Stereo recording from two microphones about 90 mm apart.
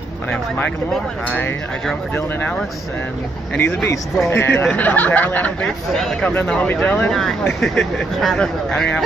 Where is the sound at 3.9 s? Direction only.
30° left (ahead or behind).